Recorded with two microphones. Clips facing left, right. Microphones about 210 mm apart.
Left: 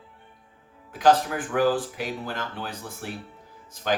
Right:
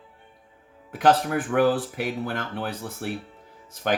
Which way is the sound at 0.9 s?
55° right (ahead or behind).